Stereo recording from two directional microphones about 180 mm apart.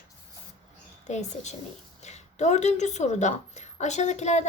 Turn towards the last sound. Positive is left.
turn(degrees=40)  # may be behind; listen again after turning